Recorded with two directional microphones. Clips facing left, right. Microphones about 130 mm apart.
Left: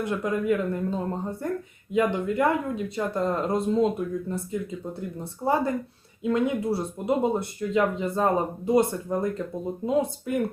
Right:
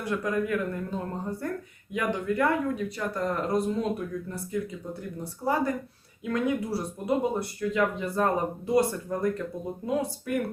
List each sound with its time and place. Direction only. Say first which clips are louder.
0.0 s speech: left 2 dB; 20° left (ahead or behind)